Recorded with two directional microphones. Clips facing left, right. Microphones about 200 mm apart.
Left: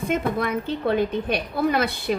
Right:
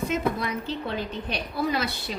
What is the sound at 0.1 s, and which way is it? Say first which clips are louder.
A woman's voice: left 3 dB; 55° left (ahead or behind).